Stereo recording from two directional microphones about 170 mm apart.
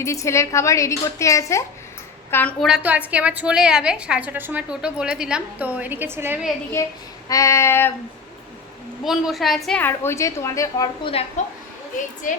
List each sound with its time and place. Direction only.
0.0 s a woman's voice: 15° left (ahead or behind)
2.6 s a woman's voice: 5° right (ahead or behind)
6.8 s a woman's voice: 15° left (ahead or behind)
9.0 s a woman's voice: centre (ahead or behind); by 10.8 s 20° left (ahead or behind)
11.0 s a woman's voice: 35° left (ahead or behind)